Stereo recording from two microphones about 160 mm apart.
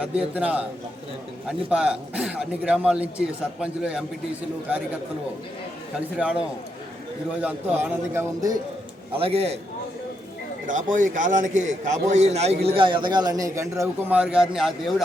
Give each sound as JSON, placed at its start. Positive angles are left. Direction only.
{"t": 0.0, "sound": "a man's voice", "side_deg": -5}
{"t": 7.4, "sound": "a man's voice", "side_deg": -10}
{"t": 9.1, "sound": "a man's voice", "side_deg": -35}
{"t": 10.7, "sound": "a man's voice", "side_deg": -55}